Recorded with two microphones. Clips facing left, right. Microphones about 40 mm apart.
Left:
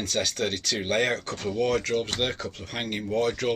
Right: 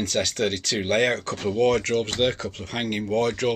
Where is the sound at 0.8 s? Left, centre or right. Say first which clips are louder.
Right 4 dB; right.